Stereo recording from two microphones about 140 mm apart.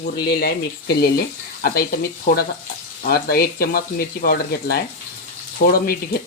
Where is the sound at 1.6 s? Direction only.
90° left.